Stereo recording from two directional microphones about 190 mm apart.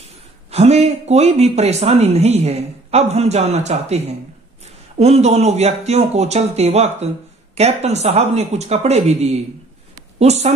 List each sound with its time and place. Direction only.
0.0 s a man's voice: 35° right (ahead or behind)